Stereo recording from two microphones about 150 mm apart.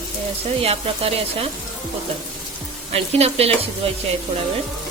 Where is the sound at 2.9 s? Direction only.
45° right (ahead or behind).